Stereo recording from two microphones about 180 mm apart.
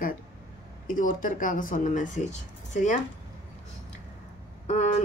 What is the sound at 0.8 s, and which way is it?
Speech, 50° left (ahead or behind).